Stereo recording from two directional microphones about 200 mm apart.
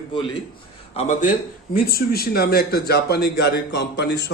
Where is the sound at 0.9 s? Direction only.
35° left (ahead or behind).